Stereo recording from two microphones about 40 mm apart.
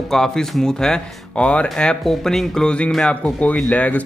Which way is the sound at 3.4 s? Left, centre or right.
Left.